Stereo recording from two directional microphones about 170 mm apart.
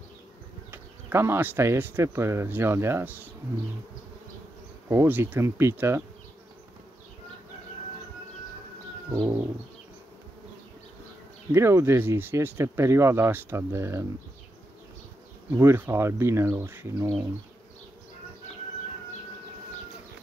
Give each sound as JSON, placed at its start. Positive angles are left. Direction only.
{"t": 0.7, "sound": "speech", "side_deg": -15}
{"t": 4.8, "sound": "speech", "side_deg": -15}
{"t": 9.1, "sound": "bird", "side_deg": -20}
{"t": 11.5, "sound": "speech", "side_deg": -15}
{"t": 15.5, "sound": "speech", "side_deg": -15}